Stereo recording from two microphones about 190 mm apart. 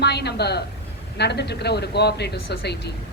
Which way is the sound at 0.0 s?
60° left (ahead or behind).